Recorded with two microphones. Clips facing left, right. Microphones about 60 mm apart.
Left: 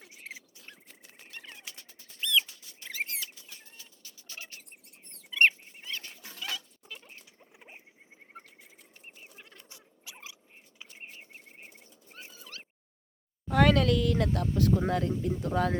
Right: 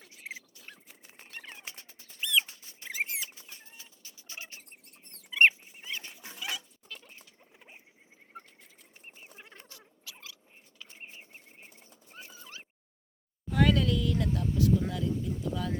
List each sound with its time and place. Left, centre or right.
0.2 s rodents: centre
1.1 s a sound: right
2.9 s rodents: centre
5.3 s dog: centre
6.8 s rodents: centre
9.3 s fowl: right
9.6 s scratch: left
11.5 s bird: left
12.3 s a sound: centre
13.5 s speech: left